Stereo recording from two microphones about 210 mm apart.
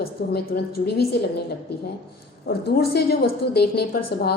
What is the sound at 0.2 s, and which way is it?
Speech, 50° left (ahead or behind).